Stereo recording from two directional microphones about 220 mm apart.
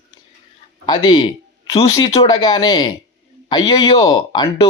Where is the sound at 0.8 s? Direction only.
20° left (ahead or behind).